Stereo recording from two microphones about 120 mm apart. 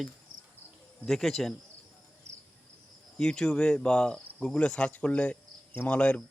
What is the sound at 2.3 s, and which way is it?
Cricket, 70° right (ahead or behind).